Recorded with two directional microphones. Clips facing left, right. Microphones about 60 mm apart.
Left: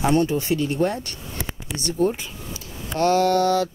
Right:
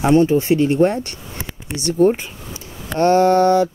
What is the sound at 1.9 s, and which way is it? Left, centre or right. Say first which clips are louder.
Mantra: right 7 dB; right.